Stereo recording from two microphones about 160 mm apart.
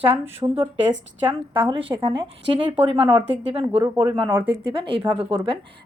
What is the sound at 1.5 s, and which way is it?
A woman's voice, 35° right (ahead or behind).